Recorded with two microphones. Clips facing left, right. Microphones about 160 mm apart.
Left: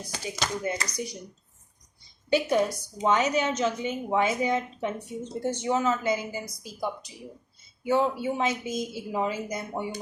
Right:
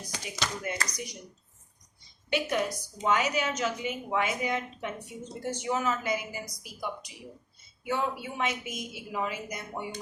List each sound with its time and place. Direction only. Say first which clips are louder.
0.3 s a woman's voice: left 3 dB; 30° left (ahead or behind)
2.3 s a woman's voice: left 5 dB; 35° left (ahead or behind)